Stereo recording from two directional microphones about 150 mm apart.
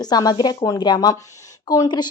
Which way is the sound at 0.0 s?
25° left (ahead or behind).